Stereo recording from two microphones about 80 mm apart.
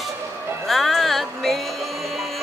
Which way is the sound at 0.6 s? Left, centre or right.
Centre.